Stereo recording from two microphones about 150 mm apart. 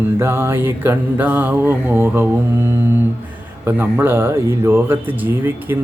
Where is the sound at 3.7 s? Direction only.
15° right (ahead or behind).